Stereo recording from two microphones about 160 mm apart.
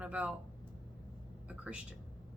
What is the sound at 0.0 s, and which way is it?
Speech, 10° right (ahead or behind).